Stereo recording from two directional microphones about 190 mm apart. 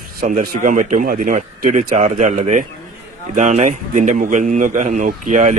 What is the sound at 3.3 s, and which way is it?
Mantra, 40° right (ahead or behind).